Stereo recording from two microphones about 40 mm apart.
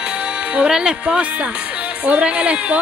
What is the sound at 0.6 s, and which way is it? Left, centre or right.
Speech, right.